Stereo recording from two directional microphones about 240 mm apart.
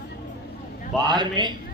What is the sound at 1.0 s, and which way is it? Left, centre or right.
Speech, centre.